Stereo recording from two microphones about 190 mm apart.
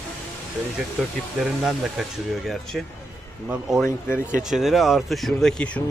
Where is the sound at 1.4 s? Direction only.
Centre (ahead or behind).